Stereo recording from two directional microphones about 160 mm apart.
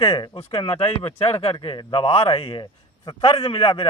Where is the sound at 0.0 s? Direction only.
30° left (ahead or behind).